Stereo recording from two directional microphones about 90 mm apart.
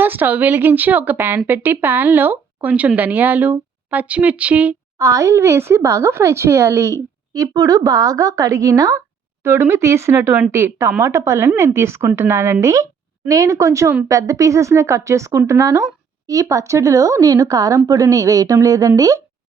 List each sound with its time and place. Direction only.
0.0 s speech: 20° right (ahead or behind)
4.9 s speech: 35° right (ahead or behind)
9.4 s speech: 30° right (ahead or behind)